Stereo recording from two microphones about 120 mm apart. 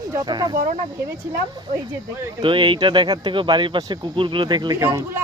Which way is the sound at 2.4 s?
45° right (ahead or behind).